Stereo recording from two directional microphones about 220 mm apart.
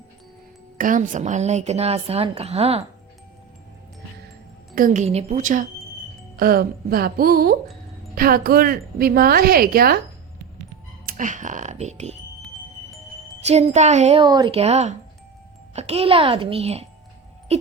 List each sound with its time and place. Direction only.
0.8 s a woman's voice: 35° right (ahead or behind)
4.7 s a woman's voice: 35° right (ahead or behind)
11.0 s speech: 35° right (ahead or behind)
13.4 s a woman's voice: 30° right (ahead or behind)
17.5 s music: 30° right (ahead or behind)